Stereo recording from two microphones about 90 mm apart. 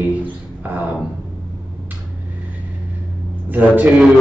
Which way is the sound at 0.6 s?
20° right (ahead or behind).